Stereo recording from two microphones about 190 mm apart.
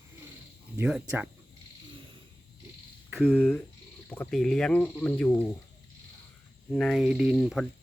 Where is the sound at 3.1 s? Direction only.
5° left (ahead or behind).